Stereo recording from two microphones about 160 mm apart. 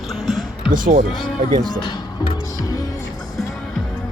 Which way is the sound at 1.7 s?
25° left (ahead or behind).